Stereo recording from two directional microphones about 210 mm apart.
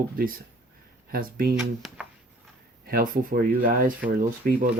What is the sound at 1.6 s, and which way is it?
Speech, 5° right (ahead or behind).